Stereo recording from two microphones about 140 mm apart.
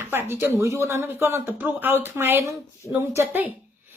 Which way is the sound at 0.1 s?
15° right (ahead or behind).